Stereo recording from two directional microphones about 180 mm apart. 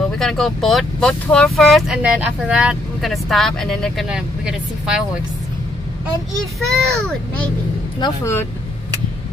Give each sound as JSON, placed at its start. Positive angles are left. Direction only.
{"t": 0.2, "sound": "speech", "side_deg": 0}
{"t": 6.6, "sound": "speech", "side_deg": 5}
{"t": 8.0, "sound": "speech", "side_deg": 15}